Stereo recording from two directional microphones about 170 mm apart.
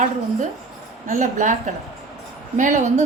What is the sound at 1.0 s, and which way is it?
Speech, 45° right (ahead or behind).